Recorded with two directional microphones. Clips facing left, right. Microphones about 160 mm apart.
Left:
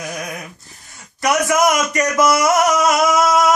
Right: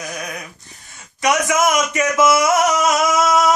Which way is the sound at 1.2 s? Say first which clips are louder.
Left 1 dB; centre (ahead or behind).